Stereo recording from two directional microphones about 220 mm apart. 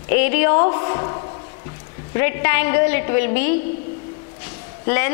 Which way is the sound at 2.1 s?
15° left (ahead or behind).